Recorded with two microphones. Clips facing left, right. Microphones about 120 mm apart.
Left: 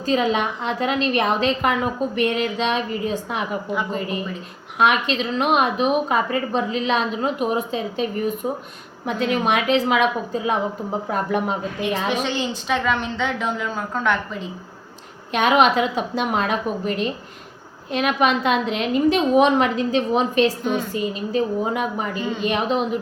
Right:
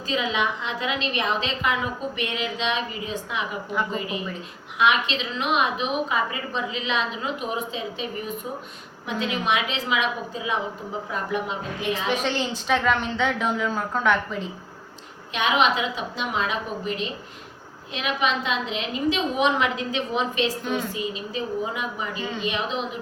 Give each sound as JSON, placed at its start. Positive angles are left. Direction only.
{"t": 0.0, "sound": "a woman's voice", "side_deg": 45}
{"t": 12.0, "sound": "a woman's voice", "side_deg": 0}
{"t": 15.3, "sound": "a woman's voice", "side_deg": 50}
{"t": 22.2, "sound": "a woman's voice", "side_deg": 5}
{"t": 22.4, "sound": "a woman's voice", "side_deg": 50}